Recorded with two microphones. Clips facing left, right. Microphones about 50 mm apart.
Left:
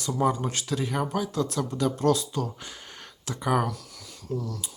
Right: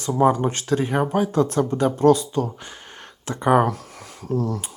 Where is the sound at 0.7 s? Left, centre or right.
Right.